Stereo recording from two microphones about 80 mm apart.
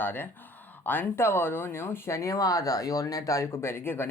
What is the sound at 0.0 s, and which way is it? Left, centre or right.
Speech, left.